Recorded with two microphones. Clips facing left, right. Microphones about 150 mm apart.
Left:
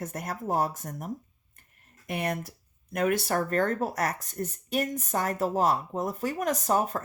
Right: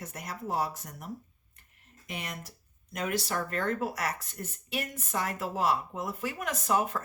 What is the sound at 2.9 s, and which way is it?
Speech, 50° left (ahead or behind).